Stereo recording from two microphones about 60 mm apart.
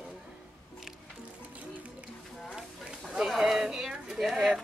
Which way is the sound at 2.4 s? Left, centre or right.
Centre.